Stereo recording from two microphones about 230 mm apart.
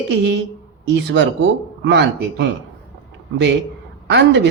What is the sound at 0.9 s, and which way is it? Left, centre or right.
A man's voice, right.